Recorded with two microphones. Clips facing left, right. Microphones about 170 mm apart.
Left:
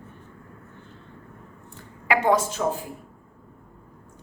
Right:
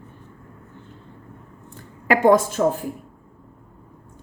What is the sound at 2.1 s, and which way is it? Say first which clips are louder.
Speech: right 5 dB; 50° right (ahead or behind).